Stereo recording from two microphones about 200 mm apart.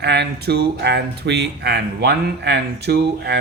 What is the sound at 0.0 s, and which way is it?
Speech, 55° right (ahead or behind).